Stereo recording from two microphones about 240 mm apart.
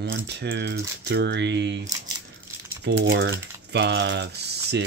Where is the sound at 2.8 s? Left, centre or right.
Right.